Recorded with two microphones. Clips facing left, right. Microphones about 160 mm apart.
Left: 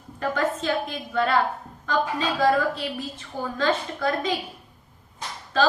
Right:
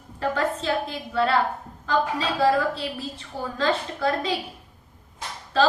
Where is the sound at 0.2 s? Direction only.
35° right (ahead or behind).